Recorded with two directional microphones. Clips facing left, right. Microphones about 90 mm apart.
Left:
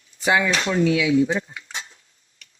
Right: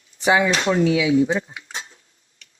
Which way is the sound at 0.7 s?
20° right (ahead or behind).